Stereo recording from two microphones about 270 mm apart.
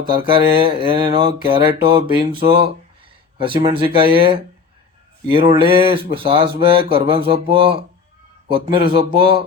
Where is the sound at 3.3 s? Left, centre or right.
Centre.